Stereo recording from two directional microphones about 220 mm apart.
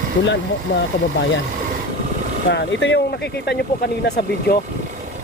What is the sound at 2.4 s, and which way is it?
Speech, 50° left (ahead or behind).